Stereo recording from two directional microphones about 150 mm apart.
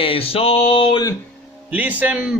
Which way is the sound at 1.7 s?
10° right (ahead or behind).